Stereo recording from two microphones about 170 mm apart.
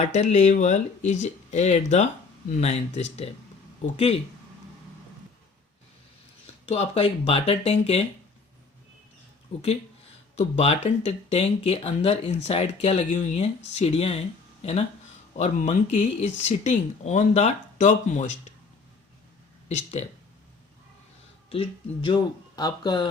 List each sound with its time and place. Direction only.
0.0 s speech: 40° left (ahead or behind)
6.7 s speech: 35° left (ahead or behind)
10.3 s speech: 40° left (ahead or behind)
19.6 s speech: 40° left (ahead or behind)
21.5 s speech: 30° left (ahead or behind)